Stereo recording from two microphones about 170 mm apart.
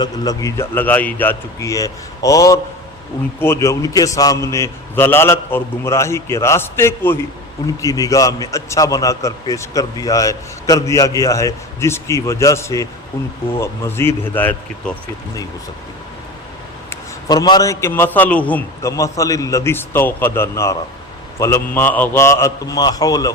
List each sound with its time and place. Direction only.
0.0 s a man's voice: 20° left (ahead or behind)
16.9 s a man's voice: 25° left (ahead or behind)